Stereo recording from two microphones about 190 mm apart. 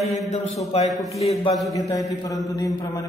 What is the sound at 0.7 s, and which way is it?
Speech, 35° left (ahead or behind).